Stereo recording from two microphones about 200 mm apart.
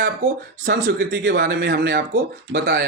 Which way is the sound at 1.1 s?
65° right (ahead or behind).